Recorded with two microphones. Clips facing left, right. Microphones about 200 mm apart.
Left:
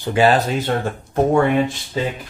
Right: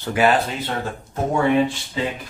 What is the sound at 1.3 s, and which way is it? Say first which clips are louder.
Speech: right 3 dB; 45° left (ahead or behind).